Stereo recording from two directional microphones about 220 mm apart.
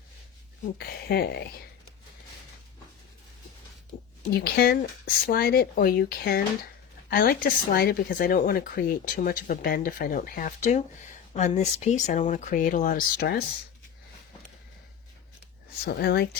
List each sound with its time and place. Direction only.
0.8 s speech: 45° left (ahead or behind)
4.4 s speech: 45° left (ahead or behind)
15.8 s speech: 45° left (ahead or behind)